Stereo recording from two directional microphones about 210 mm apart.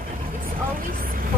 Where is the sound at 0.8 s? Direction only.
45° right (ahead or behind).